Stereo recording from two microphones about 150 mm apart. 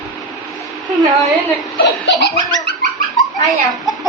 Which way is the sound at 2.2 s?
90° left.